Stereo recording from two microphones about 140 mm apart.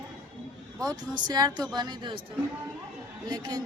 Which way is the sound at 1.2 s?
30° right (ahead or behind).